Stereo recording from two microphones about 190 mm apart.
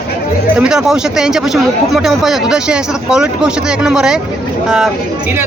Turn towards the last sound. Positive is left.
turn(degrees=-5)  # may be behind; listen again after turning